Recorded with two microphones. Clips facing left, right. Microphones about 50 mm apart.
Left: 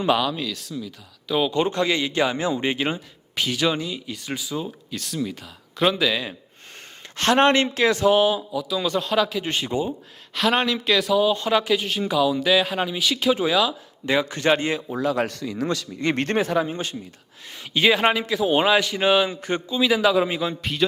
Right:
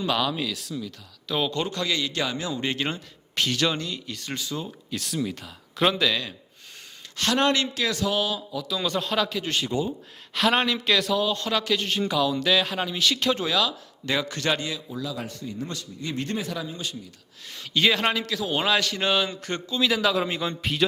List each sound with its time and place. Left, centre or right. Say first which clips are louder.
0.2 s a man's voice: left 1 dB; centre
1.5 s speech: left 6 dB; left; by 6.2 s centre
7.2 s speech: left 5 dB; left
8.5 s a man's voice: left 3 dB; centre
9.4 s speech: left 2 dB; left
10.3 s speech: left 1 dB; centre; by 16.5 s left
16.5 s speech: left 8 dB; left
17.5 s speech: left 3 dB; centre